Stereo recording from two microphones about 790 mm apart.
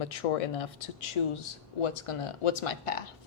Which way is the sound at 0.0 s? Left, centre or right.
Left.